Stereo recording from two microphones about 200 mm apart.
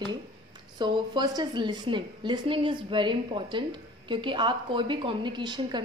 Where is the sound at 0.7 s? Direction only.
20° right (ahead or behind).